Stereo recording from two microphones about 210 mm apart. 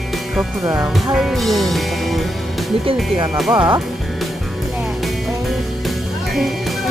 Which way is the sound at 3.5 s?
20° right (ahead or behind).